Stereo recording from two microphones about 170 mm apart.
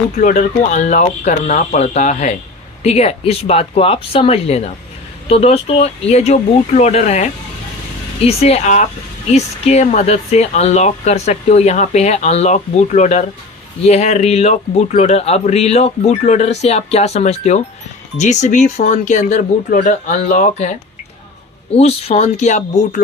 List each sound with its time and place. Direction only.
0.2 s speech: 45° left (ahead or behind)
21.8 s speech: 35° left (ahead or behind)